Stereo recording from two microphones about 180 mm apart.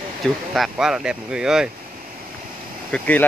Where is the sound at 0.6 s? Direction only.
5° right (ahead or behind).